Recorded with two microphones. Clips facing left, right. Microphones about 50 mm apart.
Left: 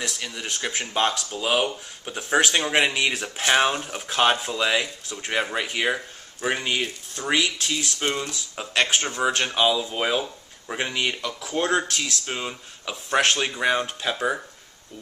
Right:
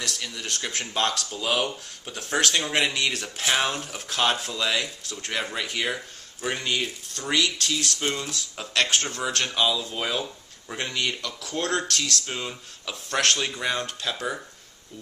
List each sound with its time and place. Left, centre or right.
0.0 s speech: centre